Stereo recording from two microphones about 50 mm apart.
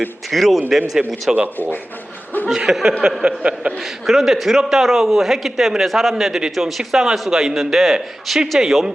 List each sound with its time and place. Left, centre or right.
0.3 s a man's voice: centre
1.3 s a man's voice: centre
2.5 s a man's voice: centre
3.2 s speech: right
3.8 s a man's voice: centre